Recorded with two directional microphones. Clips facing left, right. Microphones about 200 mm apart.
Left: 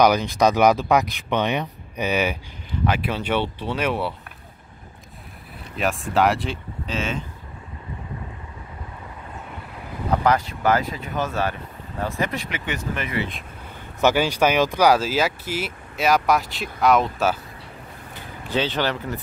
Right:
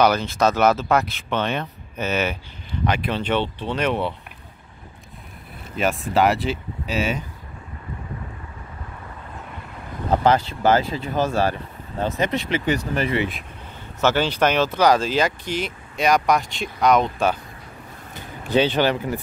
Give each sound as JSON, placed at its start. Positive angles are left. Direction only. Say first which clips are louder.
{"t": 0.0, "sound": "speech", "louder": "left 1 dB", "side_deg": 15}
{"t": 5.8, "sound": "speech", "louder": "right 1 dB", "side_deg": 0}
{"t": 10.2, "sound": "speech", "louder": "right 2 dB", "side_deg": -25}
{"t": 12.0, "sound": "speech", "louder": "right 3 dB", "side_deg": -20}
{"t": 14.0, "sound": "speech", "louder": "left 1 dB", "side_deg": 10}
{"t": 18.5, "sound": "speech", "louder": "right 5 dB", "side_deg": -15}